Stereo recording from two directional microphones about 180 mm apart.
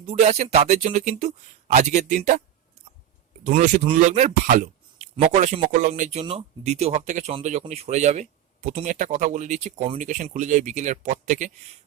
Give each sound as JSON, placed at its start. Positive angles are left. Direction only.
{"t": 0.0, "sound": "speech", "side_deg": -35}
{"t": 3.4, "sound": "a man's voice", "side_deg": -45}